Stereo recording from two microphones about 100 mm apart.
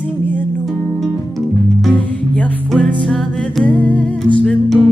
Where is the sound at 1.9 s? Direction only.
15° left (ahead or behind).